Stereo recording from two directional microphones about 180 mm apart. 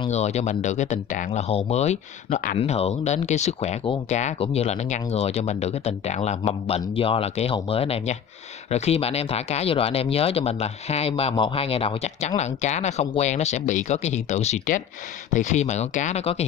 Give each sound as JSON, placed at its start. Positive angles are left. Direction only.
{"t": 0.1, "sound": "speech", "side_deg": 40}